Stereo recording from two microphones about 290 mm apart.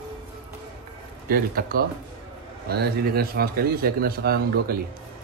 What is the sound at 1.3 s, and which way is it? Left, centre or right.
Speech, right.